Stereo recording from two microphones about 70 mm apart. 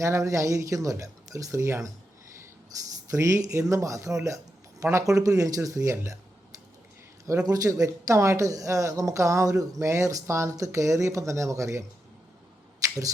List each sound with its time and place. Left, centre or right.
0.0 s speech: right
3.1 s speech: right
7.4 s speech: right